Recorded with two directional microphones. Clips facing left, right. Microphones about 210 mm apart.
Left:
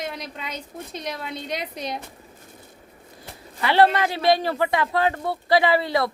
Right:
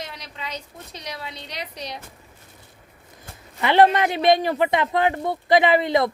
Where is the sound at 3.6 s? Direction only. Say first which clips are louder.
Right 2 dB; 20° right (ahead or behind).